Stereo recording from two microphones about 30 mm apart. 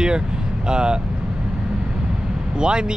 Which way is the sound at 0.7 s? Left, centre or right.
Right.